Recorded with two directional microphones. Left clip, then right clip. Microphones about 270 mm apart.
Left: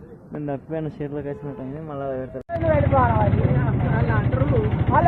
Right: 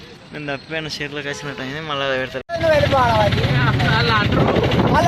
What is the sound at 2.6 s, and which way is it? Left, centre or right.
Vehicle, right.